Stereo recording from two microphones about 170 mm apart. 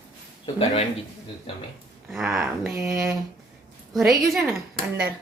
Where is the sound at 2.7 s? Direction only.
15° right (ahead or behind).